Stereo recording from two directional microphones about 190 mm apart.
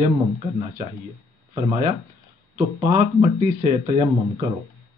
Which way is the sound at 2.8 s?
35° right (ahead or behind).